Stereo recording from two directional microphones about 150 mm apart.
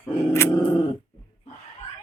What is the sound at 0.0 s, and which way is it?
Dog, 15° left (ahead or behind).